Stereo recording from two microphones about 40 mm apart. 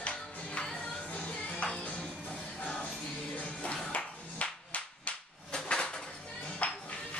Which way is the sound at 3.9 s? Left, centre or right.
Left.